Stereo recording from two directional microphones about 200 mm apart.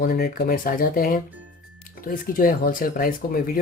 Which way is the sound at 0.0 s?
50° left (ahead or behind).